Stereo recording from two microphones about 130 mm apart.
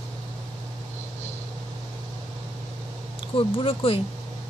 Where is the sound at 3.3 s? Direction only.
45° left (ahead or behind).